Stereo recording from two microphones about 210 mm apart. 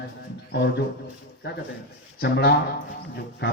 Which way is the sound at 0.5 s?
55° left (ahead or behind).